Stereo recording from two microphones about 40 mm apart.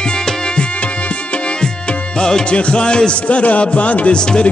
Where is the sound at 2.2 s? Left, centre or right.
Centre.